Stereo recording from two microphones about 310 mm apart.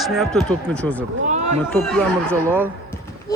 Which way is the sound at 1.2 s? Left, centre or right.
Right.